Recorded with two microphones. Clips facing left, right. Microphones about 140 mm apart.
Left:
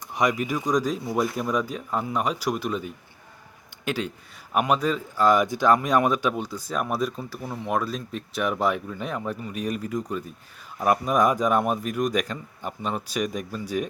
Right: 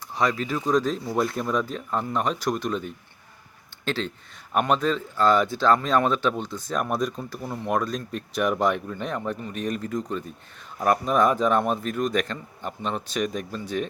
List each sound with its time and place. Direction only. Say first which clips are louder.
0.1 s speech: left 1 dB; 15° left (ahead or behind)